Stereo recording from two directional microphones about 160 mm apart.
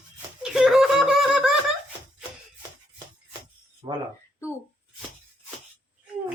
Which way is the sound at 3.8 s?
25° right (ahead or behind).